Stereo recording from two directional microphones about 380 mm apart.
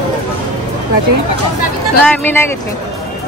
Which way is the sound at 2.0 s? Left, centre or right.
Centre.